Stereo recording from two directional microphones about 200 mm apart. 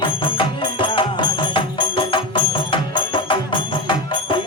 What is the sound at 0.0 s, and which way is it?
Music, 25° left (ahead or behind).